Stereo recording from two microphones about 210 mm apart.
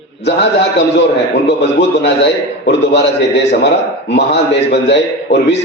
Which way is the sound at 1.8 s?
55° left (ahead or behind).